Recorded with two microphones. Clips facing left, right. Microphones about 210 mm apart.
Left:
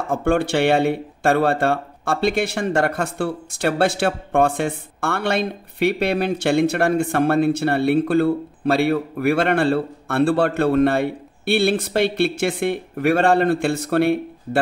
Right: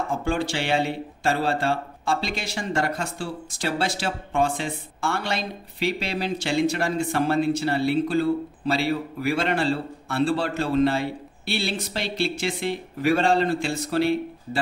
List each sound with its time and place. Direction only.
0.1 s speech: 60° left (ahead or behind)